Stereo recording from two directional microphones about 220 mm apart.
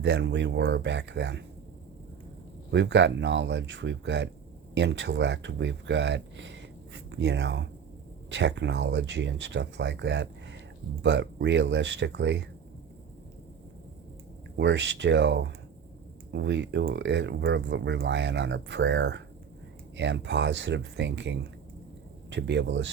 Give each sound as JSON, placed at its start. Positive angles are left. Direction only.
{"t": 0.0, "sound": "speech", "side_deg": -55}
{"t": 2.7, "sound": "speech", "side_deg": -55}
{"t": 14.6, "sound": "speech", "side_deg": -55}